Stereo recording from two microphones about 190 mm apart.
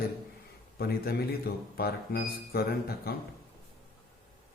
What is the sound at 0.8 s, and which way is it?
A man's voice, 55° left (ahead or behind).